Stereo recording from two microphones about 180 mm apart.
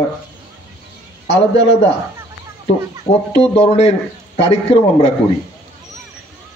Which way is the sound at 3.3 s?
35° left (ahead or behind).